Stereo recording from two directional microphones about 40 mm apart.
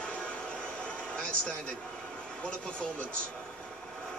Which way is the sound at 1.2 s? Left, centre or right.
Left.